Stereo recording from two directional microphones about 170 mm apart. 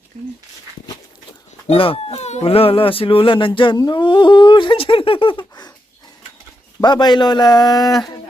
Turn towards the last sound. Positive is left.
turn(degrees=20)  # may be behind; listen again after turning